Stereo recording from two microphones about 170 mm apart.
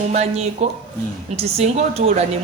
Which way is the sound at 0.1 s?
40° right (ahead or behind).